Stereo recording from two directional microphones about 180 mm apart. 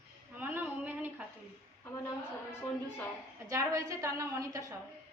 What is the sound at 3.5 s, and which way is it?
Speech, 15° right (ahead or behind).